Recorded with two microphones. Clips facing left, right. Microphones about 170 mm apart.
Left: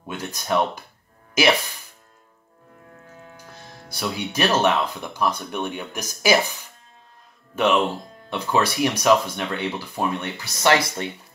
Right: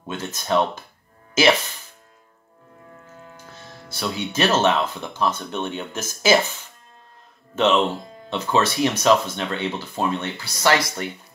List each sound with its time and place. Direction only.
0.0 s speech: 10° left (ahead or behind)
3.9 s speech: 15° left (ahead or behind)